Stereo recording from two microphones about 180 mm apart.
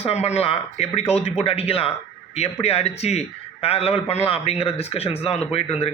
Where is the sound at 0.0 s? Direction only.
35° left (ahead or behind).